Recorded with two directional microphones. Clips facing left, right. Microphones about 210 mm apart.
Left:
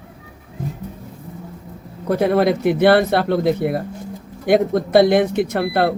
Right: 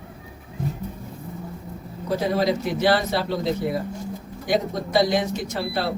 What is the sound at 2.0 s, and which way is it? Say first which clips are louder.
Speech: left 6 dB; 60° left (ahead or behind).